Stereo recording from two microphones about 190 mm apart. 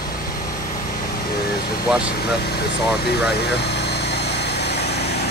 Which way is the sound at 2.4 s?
60° left (ahead or behind).